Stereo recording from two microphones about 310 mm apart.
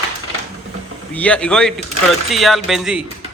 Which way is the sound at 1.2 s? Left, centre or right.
Centre.